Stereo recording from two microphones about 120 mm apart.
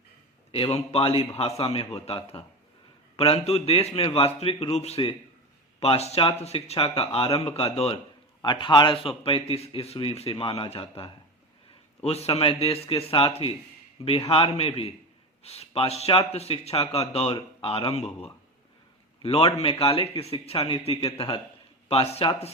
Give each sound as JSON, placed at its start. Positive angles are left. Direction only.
{"t": 0.5, "sound": "a man's voice", "side_deg": 55}
{"t": 8.4, "sound": "a man's voice", "side_deg": 40}